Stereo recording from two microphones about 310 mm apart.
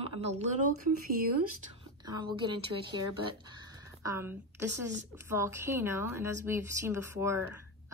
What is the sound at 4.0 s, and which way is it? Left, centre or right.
A woman's voice, centre.